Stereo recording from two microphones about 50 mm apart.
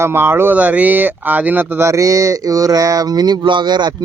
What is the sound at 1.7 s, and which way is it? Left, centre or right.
Speech, right.